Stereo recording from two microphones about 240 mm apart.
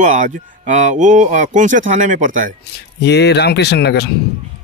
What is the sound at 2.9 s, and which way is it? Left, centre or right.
Speech, left.